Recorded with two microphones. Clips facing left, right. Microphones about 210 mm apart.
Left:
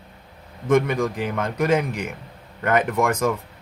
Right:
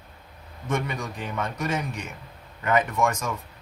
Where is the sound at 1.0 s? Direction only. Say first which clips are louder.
Left 7 dB; 90° left; by 2.0 s 70° left (ahead or behind).